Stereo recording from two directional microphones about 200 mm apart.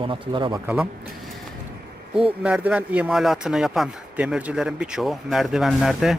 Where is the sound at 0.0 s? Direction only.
25° right (ahead or behind).